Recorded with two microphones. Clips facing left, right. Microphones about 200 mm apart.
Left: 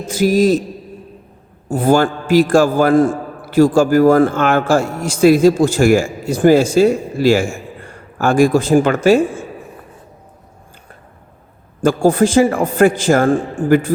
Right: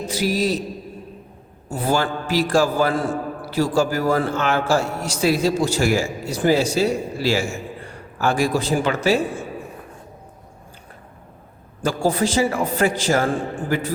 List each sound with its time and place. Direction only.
0.1 s a man's voice: 50° left (ahead or behind)
1.6 s a man's voice: 50° left (ahead or behind)
11.8 s a man's voice: 50° left (ahead or behind)